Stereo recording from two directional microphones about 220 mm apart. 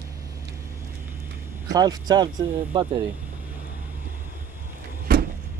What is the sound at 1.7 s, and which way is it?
Speech, 15° right (ahead or behind).